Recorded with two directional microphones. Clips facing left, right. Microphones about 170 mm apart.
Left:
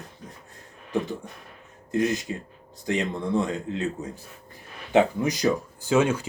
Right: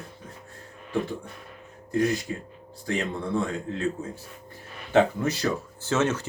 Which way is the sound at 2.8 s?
20° left (ahead or behind).